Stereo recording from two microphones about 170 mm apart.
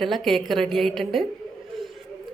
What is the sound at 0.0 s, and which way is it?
A woman's voice, centre (ahead or behind).